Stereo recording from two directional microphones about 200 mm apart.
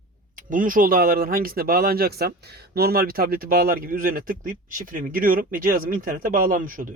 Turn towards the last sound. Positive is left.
turn(degrees=-45)  # may be behind; listen again after turning